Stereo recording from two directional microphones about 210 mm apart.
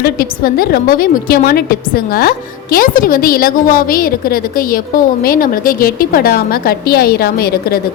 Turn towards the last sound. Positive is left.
turn(degrees=45)  # may be behind; listen again after turning